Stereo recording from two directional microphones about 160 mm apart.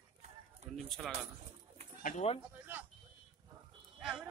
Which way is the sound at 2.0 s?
45° left (ahead or behind).